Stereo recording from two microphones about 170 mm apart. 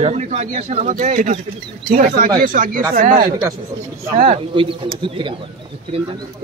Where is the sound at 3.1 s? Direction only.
25° right (ahead or behind).